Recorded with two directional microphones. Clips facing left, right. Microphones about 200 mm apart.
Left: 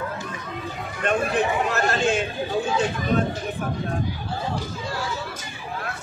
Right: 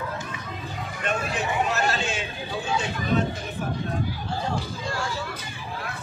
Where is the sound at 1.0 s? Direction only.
55° left (ahead or behind).